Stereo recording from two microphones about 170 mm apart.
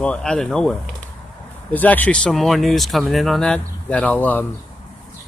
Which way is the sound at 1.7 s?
10° left (ahead or behind).